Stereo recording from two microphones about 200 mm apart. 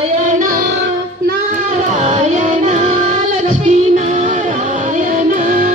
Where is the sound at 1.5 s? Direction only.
35° right (ahead or behind).